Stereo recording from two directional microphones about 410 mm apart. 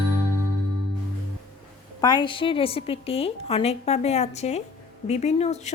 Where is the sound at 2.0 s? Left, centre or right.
Centre.